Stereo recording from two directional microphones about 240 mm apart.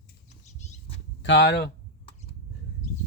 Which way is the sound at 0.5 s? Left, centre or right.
Left.